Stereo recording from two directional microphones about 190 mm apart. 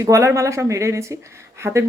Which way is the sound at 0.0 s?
15° right (ahead or behind).